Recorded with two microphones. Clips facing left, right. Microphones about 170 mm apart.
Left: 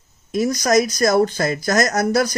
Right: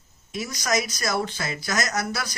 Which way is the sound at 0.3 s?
45° left (ahead or behind).